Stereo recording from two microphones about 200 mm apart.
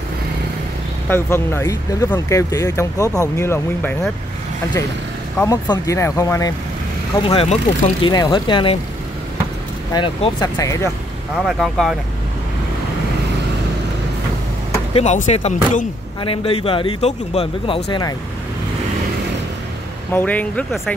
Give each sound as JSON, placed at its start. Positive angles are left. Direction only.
{"t": 1.0, "sound": "speech", "side_deg": 10}
{"t": 5.4, "sound": "speech", "side_deg": 15}
{"t": 7.2, "sound": "speech", "side_deg": 30}
{"t": 9.9, "sound": "speech", "side_deg": 20}
{"t": 11.4, "sound": "speech", "side_deg": 0}
{"t": 15.0, "sound": "speech", "side_deg": 35}
{"t": 20.1, "sound": "speech", "side_deg": 10}